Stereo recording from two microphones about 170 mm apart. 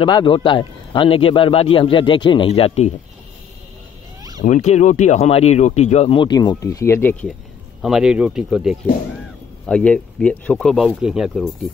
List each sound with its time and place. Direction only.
0.0 s speech: 30° left (ahead or behind)
4.5 s speech: 45° left (ahead or behind); by 7.3 s 10° left (ahead or behind)
7.8 s speech: 5° right (ahead or behind)